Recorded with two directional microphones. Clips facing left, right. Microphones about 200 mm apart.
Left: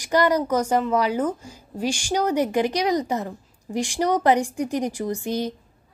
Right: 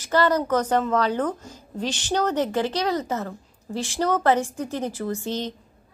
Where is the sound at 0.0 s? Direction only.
15° left (ahead or behind).